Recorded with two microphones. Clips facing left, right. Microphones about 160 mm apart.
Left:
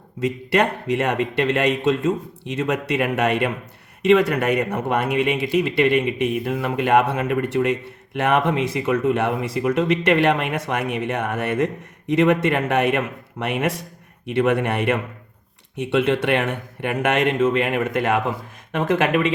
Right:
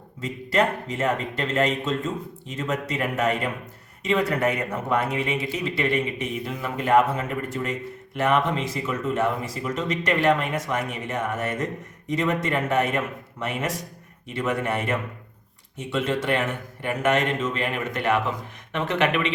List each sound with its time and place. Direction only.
0.2 s speech: 70° left (ahead or behind); by 19.3 s 45° left (ahead or behind)